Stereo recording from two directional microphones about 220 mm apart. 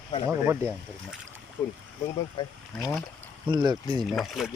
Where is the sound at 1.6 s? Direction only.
10° left (ahead or behind).